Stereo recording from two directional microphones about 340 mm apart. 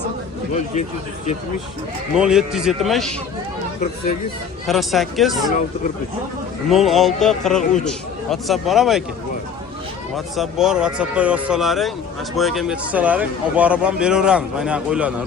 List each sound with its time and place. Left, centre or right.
2.1 s a man's voice: centre
4.6 s a man's voice: centre
6.7 s a man's voice: centre
10.2 s a man's voice: centre